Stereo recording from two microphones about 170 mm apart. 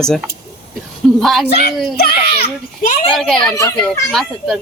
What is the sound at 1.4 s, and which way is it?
Speech, 70° left (ahead or behind).